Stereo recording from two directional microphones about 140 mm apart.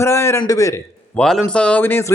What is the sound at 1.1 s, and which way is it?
Speech, 5° left (ahead or behind).